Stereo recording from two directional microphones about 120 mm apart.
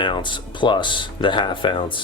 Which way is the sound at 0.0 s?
40° left (ahead or behind).